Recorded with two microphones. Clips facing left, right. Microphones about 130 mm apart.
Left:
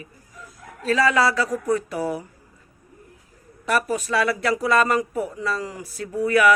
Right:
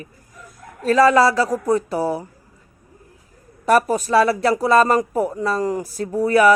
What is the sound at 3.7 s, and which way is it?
Speech, 40° right (ahead or behind).